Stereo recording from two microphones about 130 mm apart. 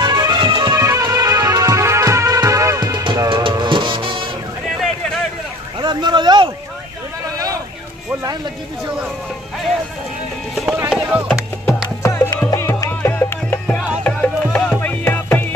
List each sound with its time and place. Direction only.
0.0 s music: 30° right (ahead or behind)
5.8 s a sound: 35° right (ahead or behind)
10.5 s music: centre (ahead or behind)
12.0 s music: 25° left (ahead or behind)